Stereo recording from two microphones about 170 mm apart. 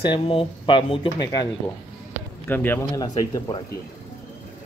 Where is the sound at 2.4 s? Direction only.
10° left (ahead or behind).